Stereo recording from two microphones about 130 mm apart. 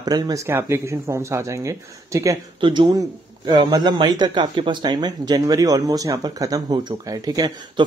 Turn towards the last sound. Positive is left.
turn(degrees=-30)  # may be behind; listen again after turning